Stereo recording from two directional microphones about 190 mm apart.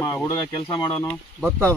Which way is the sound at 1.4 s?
Centre (ahead or behind).